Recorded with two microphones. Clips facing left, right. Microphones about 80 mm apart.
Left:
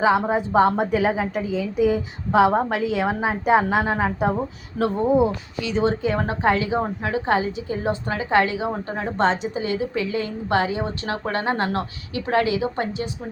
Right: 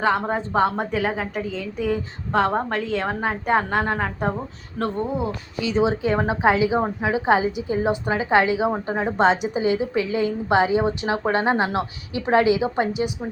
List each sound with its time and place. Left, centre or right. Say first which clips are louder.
0.0 s a woman's voice: left 3 dB; centre
5.0 s speech: left 8 dB; left
5.6 s a woman's voice: right 1 dB; centre
9.6 s a woman's voice: right 3 dB; centre